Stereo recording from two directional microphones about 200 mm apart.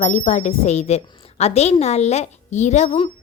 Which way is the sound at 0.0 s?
35° left (ahead or behind).